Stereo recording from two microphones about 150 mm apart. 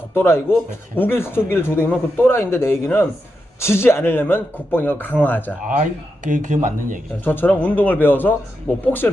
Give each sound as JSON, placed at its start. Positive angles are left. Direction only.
{"t": 0.1, "sound": "speech", "side_deg": 15}
{"t": 5.6, "sound": "speech", "side_deg": -55}
{"t": 7.3, "sound": "speech", "side_deg": 10}